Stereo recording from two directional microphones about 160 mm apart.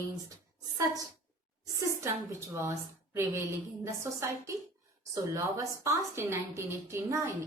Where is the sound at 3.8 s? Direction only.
20° right (ahead or behind).